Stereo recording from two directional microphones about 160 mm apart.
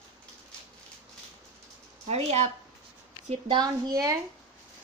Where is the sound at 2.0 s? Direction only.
40° right (ahead or behind).